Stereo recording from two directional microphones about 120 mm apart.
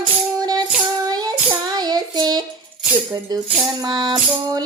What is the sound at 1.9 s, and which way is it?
Child singing, 35° right (ahead or behind).